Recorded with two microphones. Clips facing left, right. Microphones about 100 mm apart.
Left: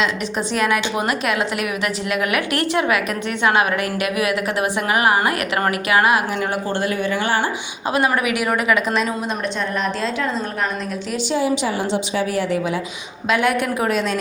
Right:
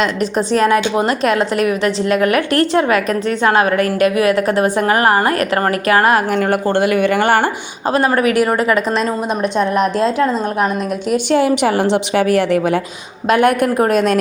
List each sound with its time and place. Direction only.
0.0 s a woman's voice: 40° right (ahead or behind); by 7.5 s 65° right (ahead or behind)
7.9 s a woman's voice: 35° right (ahead or behind)
9.6 s a woman's voice: 45° right (ahead or behind)
11.1 s a woman's voice: 60° right (ahead or behind)
13.2 s a woman's voice: 50° right (ahead or behind)